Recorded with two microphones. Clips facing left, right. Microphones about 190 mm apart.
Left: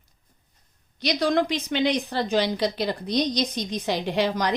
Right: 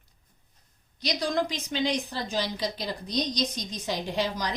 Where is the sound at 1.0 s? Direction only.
65° left (ahead or behind).